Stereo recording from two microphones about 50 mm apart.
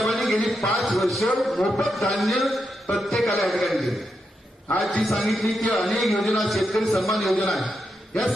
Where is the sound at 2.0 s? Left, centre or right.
Centre.